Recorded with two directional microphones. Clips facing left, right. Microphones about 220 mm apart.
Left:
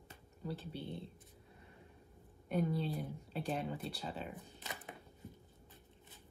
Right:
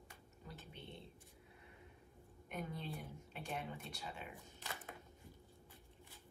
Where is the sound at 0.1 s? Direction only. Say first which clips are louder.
Left 13 dB; 30° left (ahead or behind).